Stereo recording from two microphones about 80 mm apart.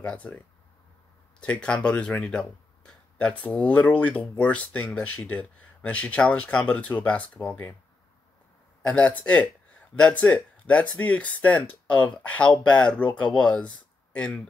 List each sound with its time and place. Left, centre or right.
0.0 s speech: centre
1.4 s speech: centre
8.8 s speech: centre